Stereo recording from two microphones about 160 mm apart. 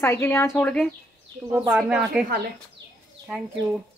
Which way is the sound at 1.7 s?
5° right (ahead or behind).